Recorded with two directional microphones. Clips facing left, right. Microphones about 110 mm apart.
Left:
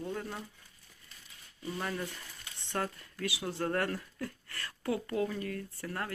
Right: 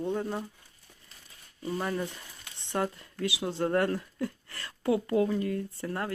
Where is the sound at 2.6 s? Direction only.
20° right (ahead or behind).